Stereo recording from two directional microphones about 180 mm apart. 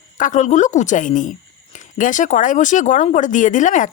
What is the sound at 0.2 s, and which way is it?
A woman's voice, 45° left (ahead or behind).